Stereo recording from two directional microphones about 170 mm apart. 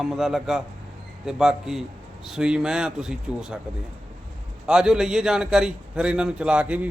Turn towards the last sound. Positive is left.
turn(degrees=-5)  # may be behind; listen again after turning